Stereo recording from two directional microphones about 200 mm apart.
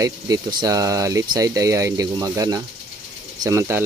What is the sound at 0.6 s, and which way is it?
Speech, 15° right (ahead or behind).